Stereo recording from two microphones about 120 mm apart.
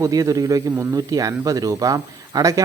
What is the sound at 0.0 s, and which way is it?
Speech, 30° right (ahead or behind).